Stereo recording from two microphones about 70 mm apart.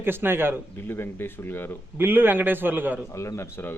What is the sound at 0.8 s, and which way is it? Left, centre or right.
Speech, left.